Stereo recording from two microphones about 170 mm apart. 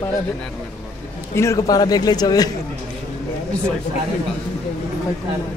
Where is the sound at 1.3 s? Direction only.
15° left (ahead or behind).